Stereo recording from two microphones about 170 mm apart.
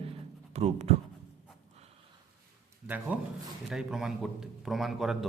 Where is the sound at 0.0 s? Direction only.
35° right (ahead or behind).